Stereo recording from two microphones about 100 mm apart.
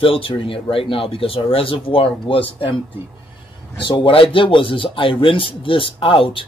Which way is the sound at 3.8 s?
50° left (ahead or behind).